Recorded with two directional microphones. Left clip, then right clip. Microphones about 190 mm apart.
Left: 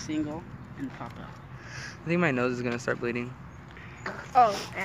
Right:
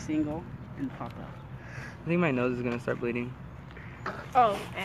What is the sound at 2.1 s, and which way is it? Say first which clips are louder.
Speech: left 1 dB; 10° left (ahead or behind).